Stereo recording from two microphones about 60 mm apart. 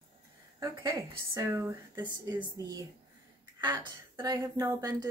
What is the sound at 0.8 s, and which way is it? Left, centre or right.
A woman's voice, right.